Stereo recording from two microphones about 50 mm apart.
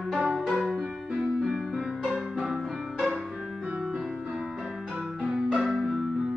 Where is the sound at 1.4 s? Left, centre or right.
Centre.